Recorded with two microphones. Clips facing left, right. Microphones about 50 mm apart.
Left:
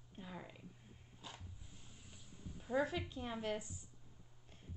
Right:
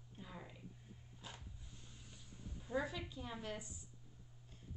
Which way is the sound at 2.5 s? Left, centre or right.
Centre.